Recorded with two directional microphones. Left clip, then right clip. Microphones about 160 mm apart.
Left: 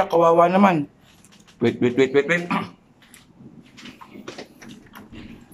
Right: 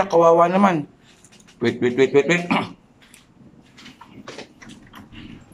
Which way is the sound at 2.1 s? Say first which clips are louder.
Right 2 dB; 20° right (ahead or behind).